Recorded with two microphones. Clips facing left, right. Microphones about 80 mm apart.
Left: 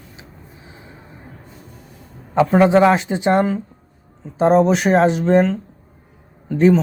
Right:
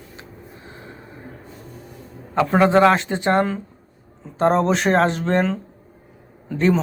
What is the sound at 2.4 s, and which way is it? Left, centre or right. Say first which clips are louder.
Speech: left 2 dB; centre.